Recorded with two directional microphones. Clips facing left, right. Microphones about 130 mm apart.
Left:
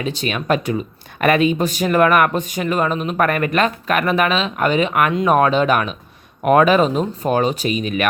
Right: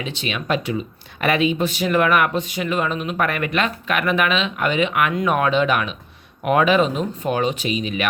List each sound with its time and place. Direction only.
0.0 s speech: 45° left (ahead or behind)